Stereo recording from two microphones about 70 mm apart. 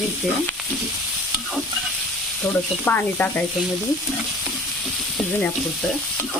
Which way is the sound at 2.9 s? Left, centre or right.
Left.